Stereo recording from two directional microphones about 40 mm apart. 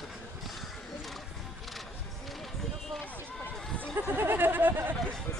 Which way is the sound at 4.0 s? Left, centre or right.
Right.